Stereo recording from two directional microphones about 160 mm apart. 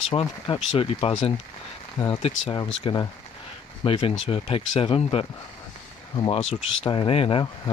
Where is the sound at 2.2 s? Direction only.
30° left (ahead or behind).